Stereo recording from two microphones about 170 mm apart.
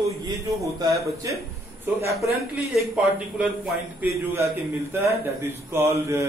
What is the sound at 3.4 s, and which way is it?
A man's voice, 5° right (ahead or behind).